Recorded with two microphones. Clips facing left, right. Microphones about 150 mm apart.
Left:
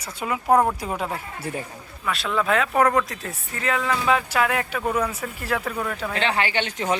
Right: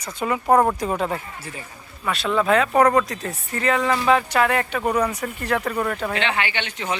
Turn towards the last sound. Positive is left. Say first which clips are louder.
# left 2 dB
turn(degrees=40)  # may be behind; listen again after turning